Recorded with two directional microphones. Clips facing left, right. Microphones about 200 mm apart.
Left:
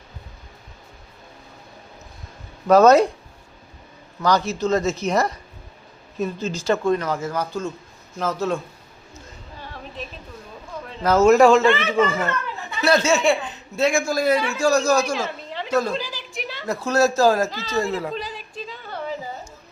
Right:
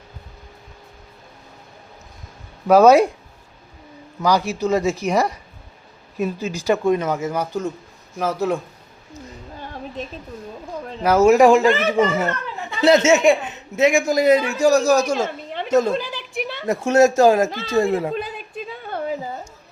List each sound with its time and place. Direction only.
2.6 s speech: 10° right (ahead or behind)
4.2 s speech: 10° right (ahead or behind)
11.0 s speech: 10° right (ahead or behind)
11.6 s speech: 40° right (ahead or behind)
11.9 s speech: 20° right (ahead or behind)
15.0 s a sound: 45° right (ahead or behind)
16.6 s speech: 25° right (ahead or behind)
17.5 s speech: 55° right (ahead or behind)
18.1 s a sound: 55° right (ahead or behind)